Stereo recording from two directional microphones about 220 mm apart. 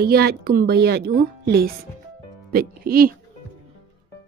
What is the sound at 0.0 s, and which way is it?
A woman's voice, 45° right (ahead or behind).